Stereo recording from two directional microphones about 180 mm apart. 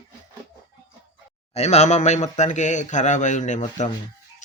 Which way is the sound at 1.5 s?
40° left (ahead or behind).